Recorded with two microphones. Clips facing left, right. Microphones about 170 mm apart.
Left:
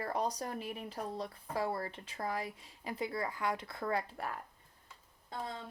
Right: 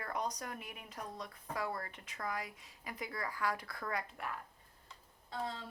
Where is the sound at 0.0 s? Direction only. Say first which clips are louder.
Left 4 dB; 30° left (ahead or behind).